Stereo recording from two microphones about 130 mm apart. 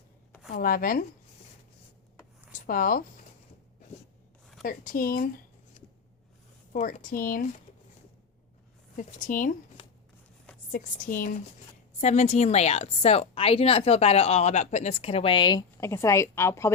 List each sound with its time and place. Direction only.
0.5 s speech: 90° left
2.6 s speech: 90° left
4.6 s speech: 90° left
6.7 s speech: 80° left
9.0 s speech: 85° left
10.7 s speech: 90° left
11.9 s a woman's voice: 65° left (ahead or behind); by 15.6 s 35° left (ahead or behind)
15.8 s a woman's voice: 20° left (ahead or behind)